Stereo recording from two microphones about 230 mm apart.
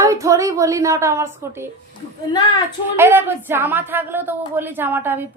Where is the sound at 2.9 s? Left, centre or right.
Centre.